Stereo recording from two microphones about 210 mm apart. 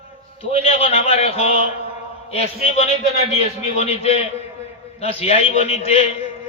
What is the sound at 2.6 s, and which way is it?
A man's voice, 25° left (ahead or behind).